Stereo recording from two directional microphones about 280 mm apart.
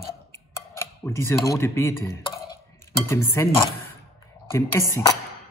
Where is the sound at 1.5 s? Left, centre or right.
Centre.